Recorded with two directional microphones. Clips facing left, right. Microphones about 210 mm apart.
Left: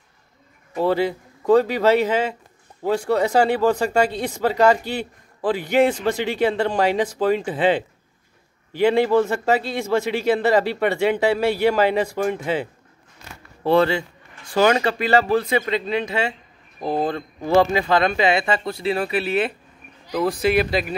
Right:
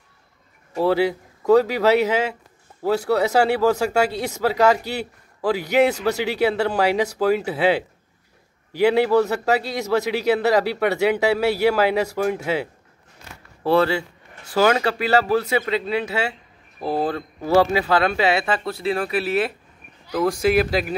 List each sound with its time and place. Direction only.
0.7 s speech: 10° right (ahead or behind)
13.7 s speech: 5° right (ahead or behind)